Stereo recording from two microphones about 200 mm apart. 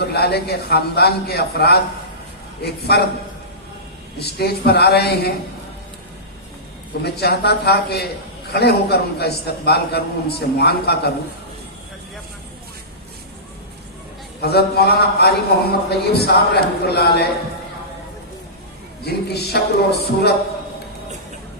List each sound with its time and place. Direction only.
0.0 s a man's voice: 55° left (ahead or behind)
4.2 s a man's voice: 55° left (ahead or behind)
7.0 s a man's voice: 55° left (ahead or behind)
14.4 s a man's voice: 55° left (ahead or behind)
19.0 s speech: 55° left (ahead or behind)